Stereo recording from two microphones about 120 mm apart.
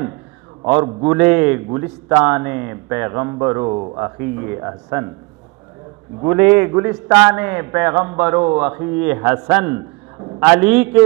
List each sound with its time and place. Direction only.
1.0 s a man's voice: 15° right (ahead or behind)
4.2 s speech: 15° right (ahead or behind)
6.2 s a man's voice: 15° right (ahead or behind)